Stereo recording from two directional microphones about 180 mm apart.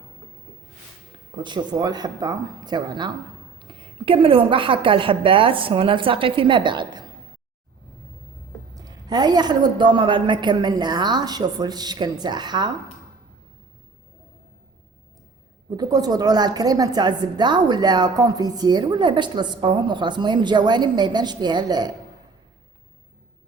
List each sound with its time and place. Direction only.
1.4 s a woman's voice: 25° right (ahead or behind)
8.7 s a woman's voice: 20° right (ahead or behind)
15.7 s a woman's voice: 20° right (ahead or behind)